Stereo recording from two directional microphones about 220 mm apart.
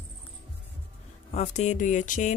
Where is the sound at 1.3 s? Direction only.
30° left (ahead or behind).